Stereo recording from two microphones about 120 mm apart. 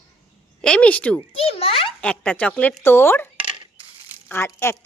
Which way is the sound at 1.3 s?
55° left (ahead or behind).